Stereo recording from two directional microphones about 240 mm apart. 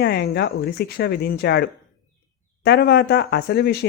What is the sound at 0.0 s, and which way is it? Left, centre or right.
Speech, left.